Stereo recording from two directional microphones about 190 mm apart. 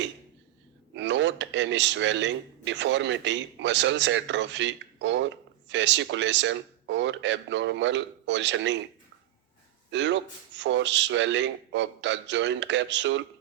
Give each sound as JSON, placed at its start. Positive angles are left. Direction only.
{"t": 0.9, "sound": "speech", "side_deg": -70}
{"t": 9.9, "sound": "speech", "side_deg": -70}